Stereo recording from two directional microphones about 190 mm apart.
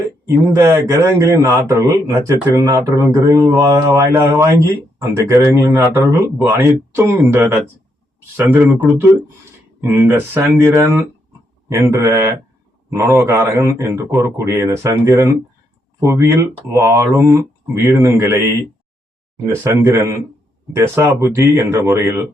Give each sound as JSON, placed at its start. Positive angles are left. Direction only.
{"t": 0.3, "sound": "a man's voice", "side_deg": -15}